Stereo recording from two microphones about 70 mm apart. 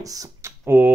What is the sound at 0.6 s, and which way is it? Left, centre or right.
Speech, right.